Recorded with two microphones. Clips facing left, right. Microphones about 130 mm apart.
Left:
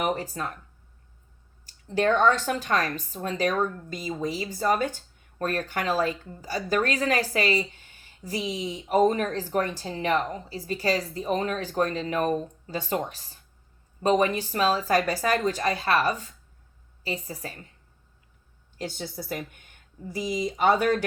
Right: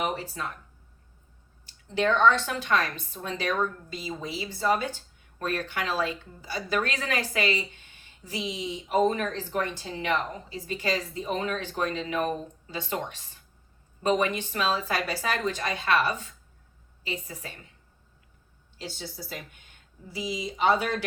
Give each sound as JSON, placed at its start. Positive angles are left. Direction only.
{"t": 0.0, "sound": "speech", "side_deg": 45}
{"t": 1.6, "sound": "speech", "side_deg": 40}
{"t": 18.8, "sound": "speech", "side_deg": 55}